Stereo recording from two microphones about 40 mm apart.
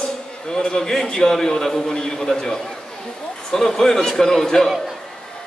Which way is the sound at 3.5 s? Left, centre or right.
Centre.